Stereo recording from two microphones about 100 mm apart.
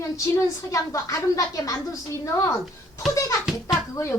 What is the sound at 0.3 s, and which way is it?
A woman's voice, 30° left (ahead or behind).